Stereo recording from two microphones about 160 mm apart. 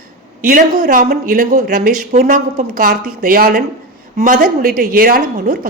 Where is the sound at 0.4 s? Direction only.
60° right (ahead or behind).